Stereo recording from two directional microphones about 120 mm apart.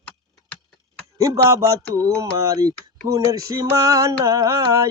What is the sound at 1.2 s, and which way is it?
Speech, 30° right (ahead or behind).